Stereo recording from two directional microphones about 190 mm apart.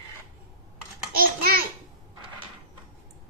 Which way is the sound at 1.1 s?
50° right (ahead or behind).